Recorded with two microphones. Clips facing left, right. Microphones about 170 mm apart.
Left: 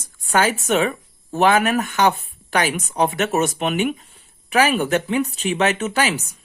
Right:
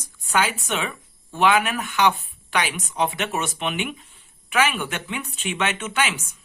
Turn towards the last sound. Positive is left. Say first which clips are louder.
# left 4 dB
turn(degrees=35)  # may be behind; listen again after turning